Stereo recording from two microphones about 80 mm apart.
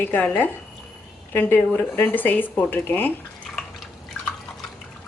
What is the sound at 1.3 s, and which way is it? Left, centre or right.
Speech, left.